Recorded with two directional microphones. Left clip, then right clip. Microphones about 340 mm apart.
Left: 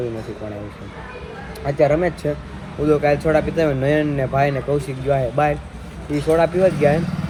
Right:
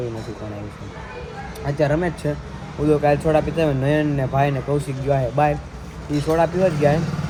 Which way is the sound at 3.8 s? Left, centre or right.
Right.